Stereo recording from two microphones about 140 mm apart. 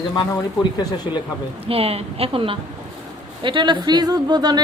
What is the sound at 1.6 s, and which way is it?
A woman's voice, 45° right (ahead or behind).